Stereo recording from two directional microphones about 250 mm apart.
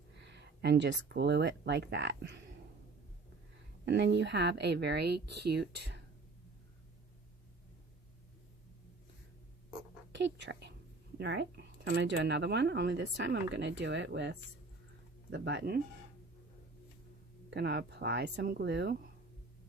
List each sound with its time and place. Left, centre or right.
0.2 s speech: right
3.8 s speech: right
10.1 s speech: right
17.5 s speech: right